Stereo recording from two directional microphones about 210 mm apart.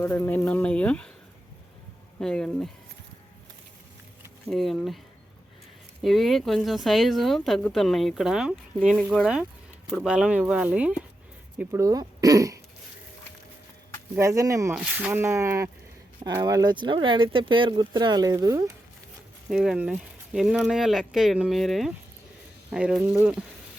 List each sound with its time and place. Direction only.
0.0 s speech: 10° left (ahead or behind)
2.2 s speech: 5° left (ahead or behind)
4.4 s speech: centre (ahead or behind)
6.0 s speech: centre (ahead or behind); by 12.5 s 15° right (ahead or behind)
14.2 s speech: 15° right (ahead or behind)
19.5 s speech: 5° right (ahead or behind)